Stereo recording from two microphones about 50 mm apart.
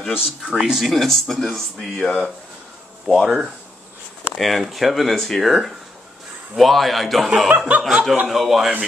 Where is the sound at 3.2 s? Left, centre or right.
Centre.